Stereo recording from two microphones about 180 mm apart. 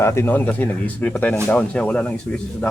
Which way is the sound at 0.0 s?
15° left (ahead or behind).